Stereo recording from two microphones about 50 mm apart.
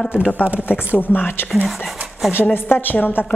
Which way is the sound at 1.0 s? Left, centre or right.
Left.